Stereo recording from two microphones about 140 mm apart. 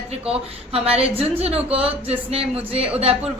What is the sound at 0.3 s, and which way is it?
A woman's voice, 45° right (ahead or behind).